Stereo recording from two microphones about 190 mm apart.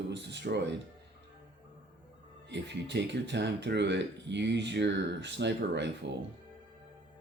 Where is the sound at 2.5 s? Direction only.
70° right (ahead or behind).